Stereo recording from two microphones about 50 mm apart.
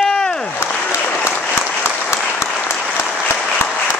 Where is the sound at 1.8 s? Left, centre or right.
Left.